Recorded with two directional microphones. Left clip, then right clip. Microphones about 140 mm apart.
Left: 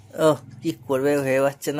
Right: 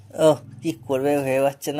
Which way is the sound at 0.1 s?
20° left (ahead or behind).